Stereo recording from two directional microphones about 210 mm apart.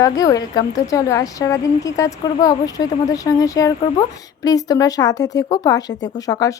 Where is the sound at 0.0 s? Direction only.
15° left (ahead or behind).